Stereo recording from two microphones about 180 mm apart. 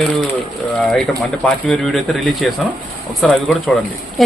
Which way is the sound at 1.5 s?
5° left (ahead or behind).